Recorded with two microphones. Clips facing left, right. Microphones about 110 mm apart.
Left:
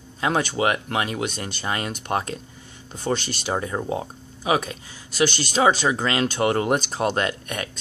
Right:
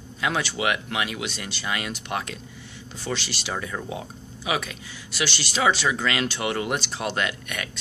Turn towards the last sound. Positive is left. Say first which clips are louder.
# left 3 dB
turn(degrees=35)  # may be behind; listen again after turning